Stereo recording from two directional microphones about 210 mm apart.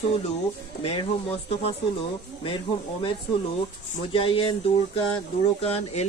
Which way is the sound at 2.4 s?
25° left (ahead or behind).